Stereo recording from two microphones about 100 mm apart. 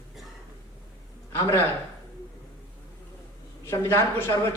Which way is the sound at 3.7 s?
25° left (ahead or behind).